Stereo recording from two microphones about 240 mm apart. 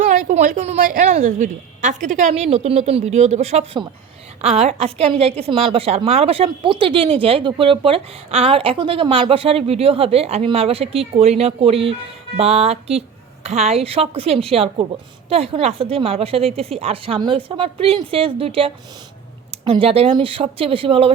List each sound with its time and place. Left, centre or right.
0.0 s a woman's voice: right